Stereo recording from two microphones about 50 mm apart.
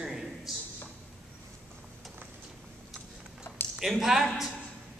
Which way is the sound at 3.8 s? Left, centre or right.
Centre.